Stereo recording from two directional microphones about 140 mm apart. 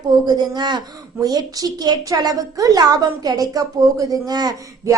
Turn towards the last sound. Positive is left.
turn(degrees=-30)  # may be behind; listen again after turning